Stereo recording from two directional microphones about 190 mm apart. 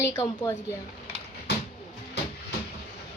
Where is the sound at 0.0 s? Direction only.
15° left (ahead or behind).